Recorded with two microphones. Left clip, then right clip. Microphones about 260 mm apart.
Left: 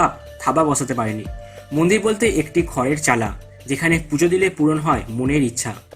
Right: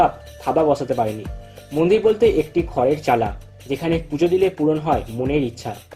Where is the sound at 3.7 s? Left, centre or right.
Left.